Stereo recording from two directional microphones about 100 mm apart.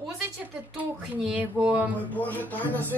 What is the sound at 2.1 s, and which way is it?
Speech, 15° left (ahead or behind).